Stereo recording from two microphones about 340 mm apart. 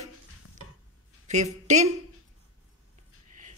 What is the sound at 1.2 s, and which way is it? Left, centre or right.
Speech, right.